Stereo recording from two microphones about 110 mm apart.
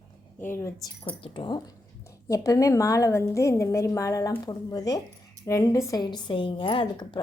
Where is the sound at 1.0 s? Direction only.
50° left (ahead or behind).